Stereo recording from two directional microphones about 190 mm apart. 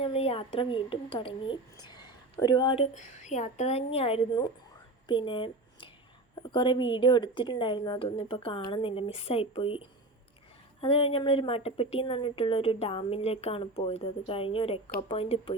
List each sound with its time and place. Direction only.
0.0 s a woman's voice: 30° left (ahead or behind)
2.9 s speech: 40° left (ahead or behind)
5.0 s a sound: 25° left (ahead or behind)
6.4 s a woman's voice: 25° left (ahead or behind)